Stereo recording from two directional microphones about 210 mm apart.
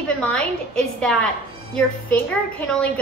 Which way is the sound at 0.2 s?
5° left (ahead or behind).